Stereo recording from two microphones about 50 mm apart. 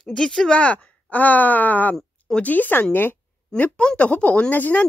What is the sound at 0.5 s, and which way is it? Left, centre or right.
Speech, left.